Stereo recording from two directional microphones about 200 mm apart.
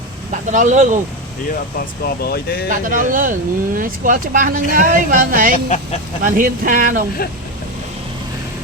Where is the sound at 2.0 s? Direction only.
50° left (ahead or behind).